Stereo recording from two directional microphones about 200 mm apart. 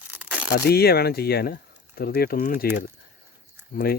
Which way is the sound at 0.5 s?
50° left (ahead or behind).